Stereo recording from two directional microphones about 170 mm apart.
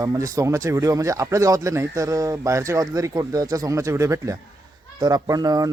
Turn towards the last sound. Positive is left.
turn(degrees=-20)  # may be behind; listen again after turning